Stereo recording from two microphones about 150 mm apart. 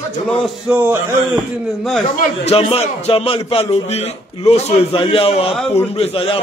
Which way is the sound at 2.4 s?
45° left (ahead or behind).